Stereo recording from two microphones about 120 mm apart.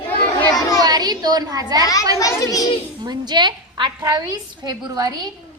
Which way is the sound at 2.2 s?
30° left (ahead or behind).